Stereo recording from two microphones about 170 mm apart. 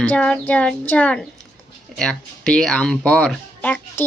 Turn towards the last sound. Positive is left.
turn(degrees=10)  # may be behind; listen again after turning